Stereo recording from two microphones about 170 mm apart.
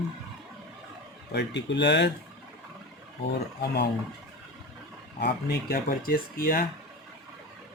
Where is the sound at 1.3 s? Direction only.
85° left.